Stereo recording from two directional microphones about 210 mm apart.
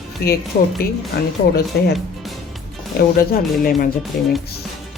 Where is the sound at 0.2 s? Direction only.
45° left (ahead or behind).